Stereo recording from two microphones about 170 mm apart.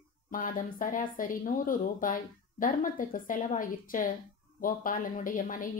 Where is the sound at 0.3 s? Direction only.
55° left (ahead or behind).